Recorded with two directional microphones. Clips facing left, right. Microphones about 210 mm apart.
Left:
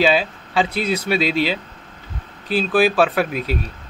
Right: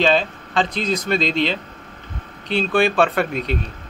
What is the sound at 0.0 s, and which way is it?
Speech, 5° left (ahead or behind).